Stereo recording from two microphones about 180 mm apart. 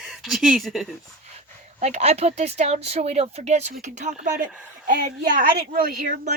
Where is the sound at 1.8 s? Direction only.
40° right (ahead or behind).